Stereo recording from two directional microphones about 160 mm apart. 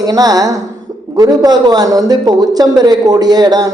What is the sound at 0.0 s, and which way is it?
Speech, 25° right (ahead or behind).